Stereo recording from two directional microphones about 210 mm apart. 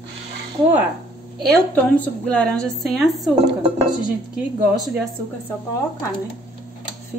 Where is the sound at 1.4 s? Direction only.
5° left (ahead or behind).